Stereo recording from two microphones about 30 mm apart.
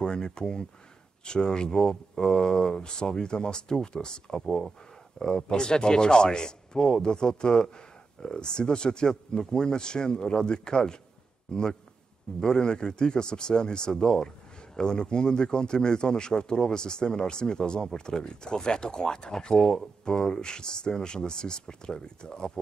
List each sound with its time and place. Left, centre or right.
0.0 s speech: left